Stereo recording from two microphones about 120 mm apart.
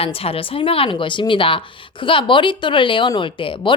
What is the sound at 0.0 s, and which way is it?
A woman's voice, 55° left (ahead or behind).